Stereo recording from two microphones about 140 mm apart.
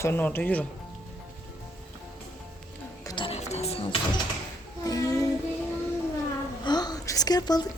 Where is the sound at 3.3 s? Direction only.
50° left (ahead or behind).